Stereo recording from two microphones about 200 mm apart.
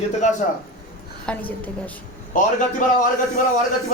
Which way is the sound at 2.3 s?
40° left (ahead or behind).